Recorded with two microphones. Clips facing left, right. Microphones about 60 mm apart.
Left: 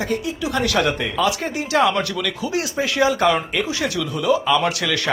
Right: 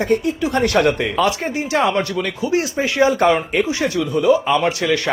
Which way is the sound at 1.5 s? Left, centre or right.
Right.